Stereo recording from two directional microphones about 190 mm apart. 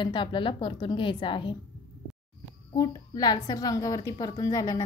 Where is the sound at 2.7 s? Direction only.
20° left (ahead or behind).